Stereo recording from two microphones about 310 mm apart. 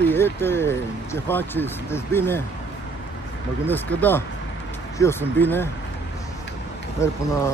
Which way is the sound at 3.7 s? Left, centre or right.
Centre.